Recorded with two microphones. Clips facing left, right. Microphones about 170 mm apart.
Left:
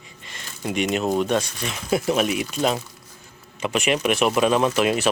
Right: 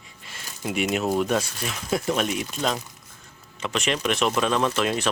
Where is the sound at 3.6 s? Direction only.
10° left (ahead or behind).